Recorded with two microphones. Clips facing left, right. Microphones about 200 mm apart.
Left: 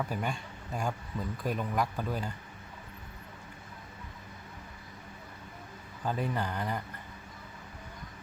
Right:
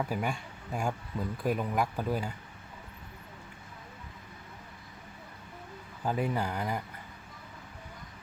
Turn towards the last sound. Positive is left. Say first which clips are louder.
# right 1 dB
turn(degrees=-10)  # may be behind; listen again after turning